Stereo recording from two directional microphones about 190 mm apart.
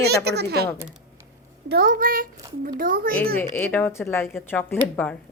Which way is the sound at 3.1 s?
10° left (ahead or behind).